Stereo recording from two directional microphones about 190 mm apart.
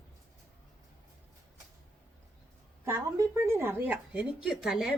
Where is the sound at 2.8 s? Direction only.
15° right (ahead or behind).